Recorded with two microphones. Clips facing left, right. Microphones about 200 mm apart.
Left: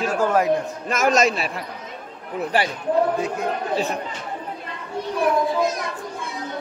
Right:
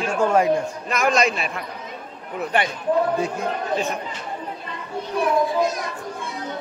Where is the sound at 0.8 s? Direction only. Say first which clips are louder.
Left 2 dB; 40° left (ahead or behind).